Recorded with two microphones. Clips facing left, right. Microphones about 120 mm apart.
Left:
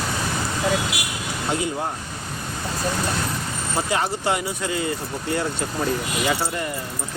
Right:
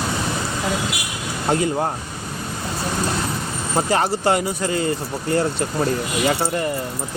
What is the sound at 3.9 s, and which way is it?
Speech, 45° right (ahead or behind).